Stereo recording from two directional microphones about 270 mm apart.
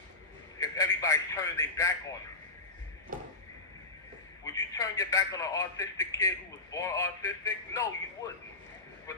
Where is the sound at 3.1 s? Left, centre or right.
Right.